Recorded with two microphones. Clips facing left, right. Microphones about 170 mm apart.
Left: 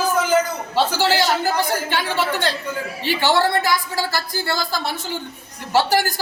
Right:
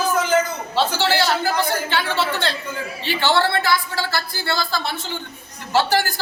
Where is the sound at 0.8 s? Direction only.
10° left (ahead or behind).